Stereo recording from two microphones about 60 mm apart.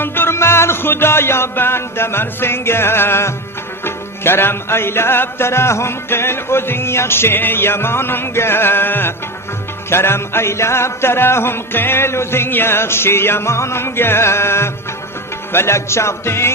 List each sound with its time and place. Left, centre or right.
0.0 s music: left